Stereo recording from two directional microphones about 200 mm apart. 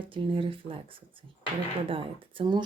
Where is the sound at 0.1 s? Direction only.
25° right (ahead or behind).